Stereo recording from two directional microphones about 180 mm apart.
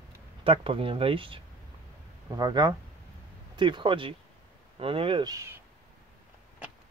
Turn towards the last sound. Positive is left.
turn(degrees=-15)  # may be behind; listen again after turning